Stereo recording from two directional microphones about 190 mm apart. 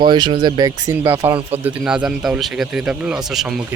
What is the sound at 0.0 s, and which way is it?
Speech, 25° right (ahead or behind).